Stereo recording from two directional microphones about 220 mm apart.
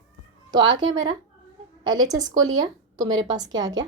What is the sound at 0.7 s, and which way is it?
A woman's voice, 20° right (ahead or behind).